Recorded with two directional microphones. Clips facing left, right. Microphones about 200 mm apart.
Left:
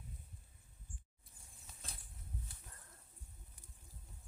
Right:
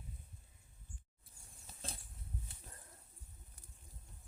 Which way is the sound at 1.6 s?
30° right (ahead or behind).